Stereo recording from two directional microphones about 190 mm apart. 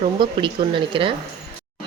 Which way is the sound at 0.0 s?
25° right (ahead or behind).